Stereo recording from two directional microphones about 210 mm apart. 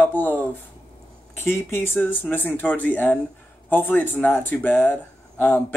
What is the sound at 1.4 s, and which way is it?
Speech, 10° left (ahead or behind).